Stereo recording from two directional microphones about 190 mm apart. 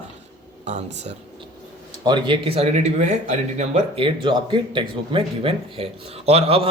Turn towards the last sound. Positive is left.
turn(degrees=-30)  # may be behind; listen again after turning